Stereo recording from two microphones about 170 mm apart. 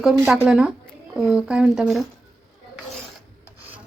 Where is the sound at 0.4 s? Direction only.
5° right (ahead or behind).